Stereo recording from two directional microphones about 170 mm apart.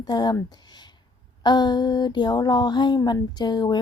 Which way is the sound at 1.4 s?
25° left (ahead or behind).